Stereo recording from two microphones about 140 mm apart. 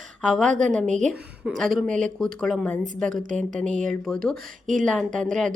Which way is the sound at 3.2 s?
65° right (ahead or behind).